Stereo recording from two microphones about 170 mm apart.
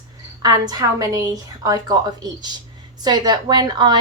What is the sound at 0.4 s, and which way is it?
A woman's voice, 20° right (ahead or behind).